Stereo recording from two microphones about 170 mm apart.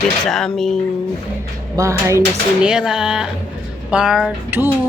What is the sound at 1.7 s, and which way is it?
Speech, 20° right (ahead or behind).